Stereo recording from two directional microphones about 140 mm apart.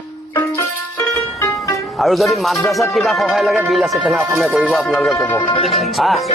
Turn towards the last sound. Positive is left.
turn(degrees=0)  # may be behind; listen again after turning